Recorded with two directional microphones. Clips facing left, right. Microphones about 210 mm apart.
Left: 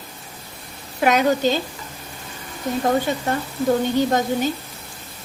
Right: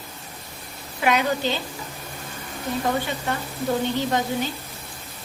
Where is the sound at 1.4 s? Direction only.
45° left (ahead or behind).